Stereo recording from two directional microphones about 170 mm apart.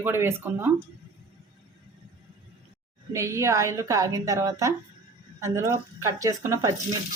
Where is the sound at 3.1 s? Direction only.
15° right (ahead or behind).